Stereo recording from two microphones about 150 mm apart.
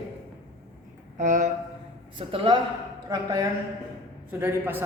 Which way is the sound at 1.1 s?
55° right (ahead or behind).